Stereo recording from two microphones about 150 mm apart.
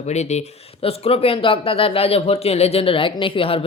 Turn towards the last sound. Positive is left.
turn(degrees=35)  # may be behind; listen again after turning